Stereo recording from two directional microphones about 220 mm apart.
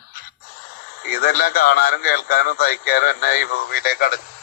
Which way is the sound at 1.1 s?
45° left (ahead or behind).